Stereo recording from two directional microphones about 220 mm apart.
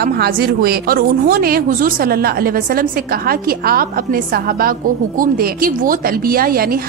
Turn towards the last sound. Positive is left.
turn(degrees=-40)  # may be behind; listen again after turning